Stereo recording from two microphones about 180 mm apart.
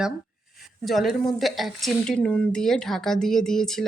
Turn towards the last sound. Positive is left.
turn(degrees=0)  # may be behind; listen again after turning